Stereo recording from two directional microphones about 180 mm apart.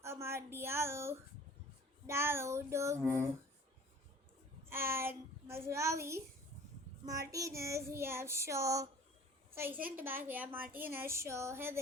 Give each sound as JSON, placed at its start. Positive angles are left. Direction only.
{"t": 0.0, "sound": "a sound", "side_deg": -15}
{"t": 2.0, "sound": "a woman's voice", "side_deg": -15}
{"t": 4.7, "sound": "a woman's voice", "side_deg": -15}